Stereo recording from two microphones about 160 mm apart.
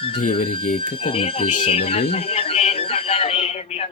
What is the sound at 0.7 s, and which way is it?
Speech, 35° left (ahead or behind).